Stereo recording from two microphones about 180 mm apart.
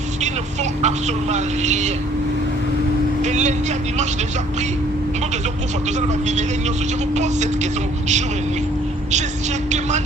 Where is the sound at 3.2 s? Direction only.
40° right (ahead or behind).